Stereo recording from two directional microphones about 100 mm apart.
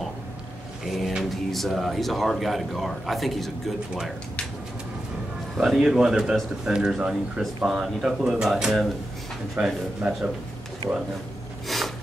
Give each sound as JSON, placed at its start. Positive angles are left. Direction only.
{"t": 0.8, "sound": "speech", "side_deg": 0}
{"t": 5.6, "sound": "a man's voice", "side_deg": -5}
{"t": 11.6, "sound": "a sound", "side_deg": 0}